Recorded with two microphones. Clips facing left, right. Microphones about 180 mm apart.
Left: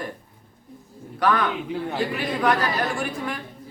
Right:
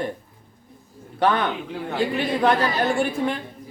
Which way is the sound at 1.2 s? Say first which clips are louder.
Right 1 dB; 25° right (ahead or behind).